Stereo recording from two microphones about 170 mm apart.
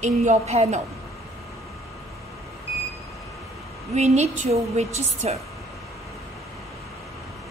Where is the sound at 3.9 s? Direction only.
40° right (ahead or behind).